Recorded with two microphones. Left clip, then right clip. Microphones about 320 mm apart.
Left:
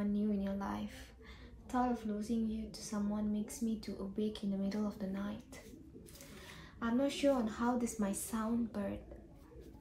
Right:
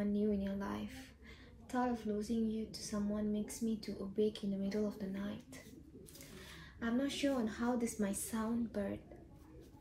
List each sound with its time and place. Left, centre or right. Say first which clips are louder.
0.0 s music: right 1 dB; centre
1.7 s a woman's voice: left 1 dB; centre
6.8 s a woman's voice: left 3 dB; centre